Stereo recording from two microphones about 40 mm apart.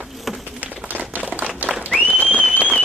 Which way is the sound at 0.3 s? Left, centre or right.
Centre.